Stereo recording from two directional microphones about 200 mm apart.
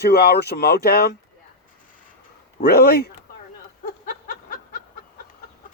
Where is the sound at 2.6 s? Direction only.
50° left (ahead or behind).